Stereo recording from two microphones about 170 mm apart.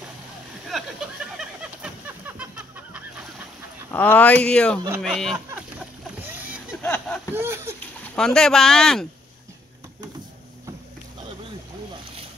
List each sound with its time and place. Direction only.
0.7 s speech: centre (ahead or behind)
1.4 s goose: 5° right (ahead or behind)
3.9 s speech: 10° left (ahead or behind)
6.4 s a sound: 10° right (ahead or behind)
6.8 s a sound: 10° left (ahead or behind)
7.3 s speech: 15° right (ahead or behind)
8.2 s speech: 5° left (ahead or behind)